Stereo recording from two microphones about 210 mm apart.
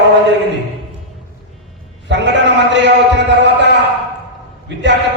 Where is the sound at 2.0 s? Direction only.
60° right (ahead or behind).